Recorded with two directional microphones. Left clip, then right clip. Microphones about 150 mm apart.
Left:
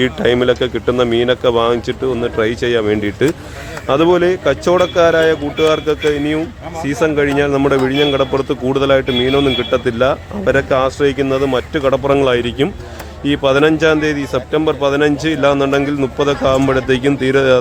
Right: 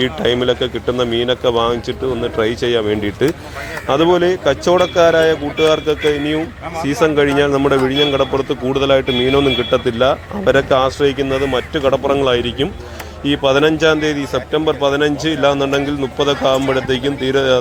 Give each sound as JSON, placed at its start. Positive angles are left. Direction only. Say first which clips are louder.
{"t": 0.0, "sound": "speech", "louder": "left 2 dB", "side_deg": 30}
{"t": 9.0, "sound": "speech", "louder": "even", "side_deg": 10}
{"t": 9.8, "sound": "speech", "louder": "even", "side_deg": 25}